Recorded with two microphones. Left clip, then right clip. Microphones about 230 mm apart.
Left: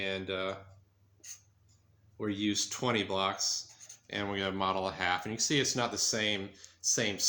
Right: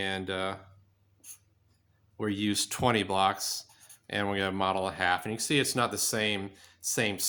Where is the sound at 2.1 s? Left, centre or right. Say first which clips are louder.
Right 2 dB; right.